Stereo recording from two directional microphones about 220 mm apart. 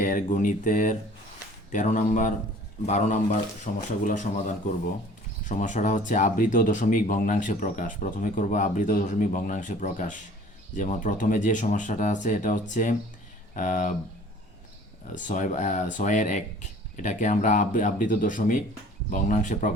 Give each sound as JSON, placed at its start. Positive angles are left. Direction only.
{"t": 0.0, "sound": "speech", "side_deg": 35}
{"t": 15.1, "sound": "speech", "side_deg": 35}